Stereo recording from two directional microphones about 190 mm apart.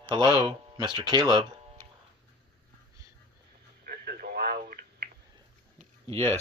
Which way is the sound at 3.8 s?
50° right (ahead or behind).